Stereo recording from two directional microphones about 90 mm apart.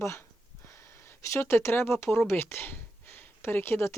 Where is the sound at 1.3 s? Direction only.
30° left (ahead or behind).